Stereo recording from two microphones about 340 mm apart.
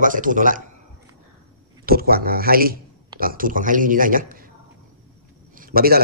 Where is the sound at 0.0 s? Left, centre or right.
Right.